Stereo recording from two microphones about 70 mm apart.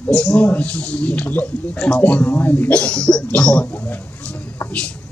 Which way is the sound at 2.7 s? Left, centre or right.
Centre.